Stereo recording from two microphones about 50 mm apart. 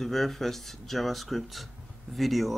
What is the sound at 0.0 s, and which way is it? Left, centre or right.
Speech, centre.